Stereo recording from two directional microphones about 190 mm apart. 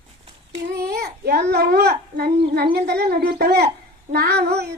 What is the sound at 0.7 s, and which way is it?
A child's voice, 55° right (ahead or behind).